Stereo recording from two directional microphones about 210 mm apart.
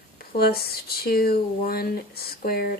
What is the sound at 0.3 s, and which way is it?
Speech, 45° left (ahead or behind).